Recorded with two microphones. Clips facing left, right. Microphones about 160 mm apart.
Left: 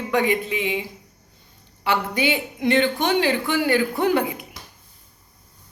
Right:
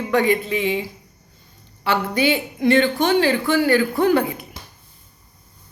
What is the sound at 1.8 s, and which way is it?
Speech, 15° left (ahead or behind).